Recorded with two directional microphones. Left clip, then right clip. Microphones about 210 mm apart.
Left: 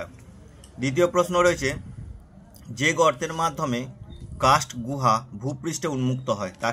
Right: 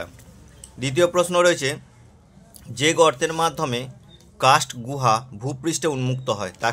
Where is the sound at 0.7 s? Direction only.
35° right (ahead or behind).